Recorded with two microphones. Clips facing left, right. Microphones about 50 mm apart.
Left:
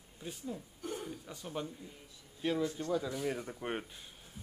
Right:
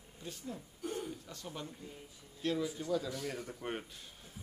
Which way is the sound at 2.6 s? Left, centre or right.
Centre.